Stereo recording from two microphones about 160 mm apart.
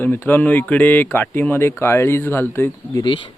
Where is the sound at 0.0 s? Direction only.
15° left (ahead or behind).